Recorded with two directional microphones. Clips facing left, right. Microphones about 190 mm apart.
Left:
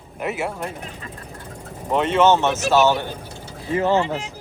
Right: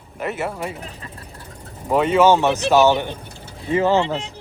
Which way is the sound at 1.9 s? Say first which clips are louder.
Right 2 dB; 5° right (ahead or behind).